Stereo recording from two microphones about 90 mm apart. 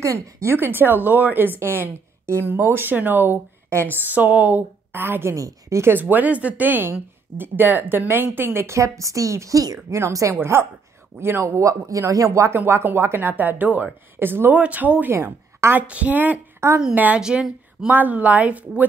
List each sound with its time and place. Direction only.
0.0 s a woman's voice: 35° right (ahead or behind)
12.5 s a woman's voice: 25° right (ahead or behind)
15.9 s a woman's voice: 15° right (ahead or behind)